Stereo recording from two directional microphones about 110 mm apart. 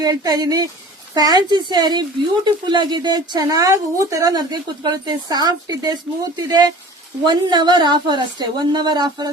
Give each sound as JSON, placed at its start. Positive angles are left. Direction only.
{"t": 0.0, "sound": "a woman's voice", "side_deg": -35}
{"t": 7.3, "sound": "a woman's voice", "side_deg": -45}